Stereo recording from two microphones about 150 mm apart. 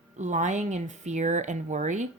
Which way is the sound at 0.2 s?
55° right (ahead or behind).